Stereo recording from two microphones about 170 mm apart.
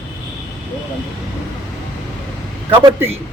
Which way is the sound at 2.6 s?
30° right (ahead or behind).